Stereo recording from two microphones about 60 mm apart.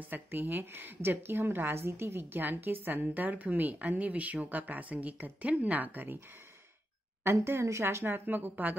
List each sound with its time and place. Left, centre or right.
0.0 s a woman's voice: right
7.3 s a woman's voice: right